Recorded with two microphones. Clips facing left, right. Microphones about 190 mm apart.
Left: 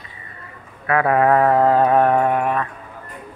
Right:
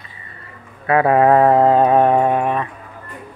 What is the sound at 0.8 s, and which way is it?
Mantra, 25° right (ahead or behind).